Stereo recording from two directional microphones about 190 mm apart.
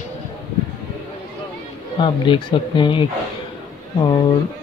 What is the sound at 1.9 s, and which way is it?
Speech, 25° left (ahead or behind).